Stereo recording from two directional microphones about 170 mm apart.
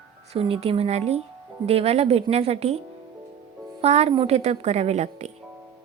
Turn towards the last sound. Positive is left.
turn(degrees=-40)  # may be behind; listen again after turning